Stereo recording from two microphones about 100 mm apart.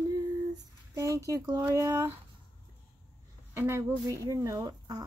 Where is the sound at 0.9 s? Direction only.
30° right (ahead or behind).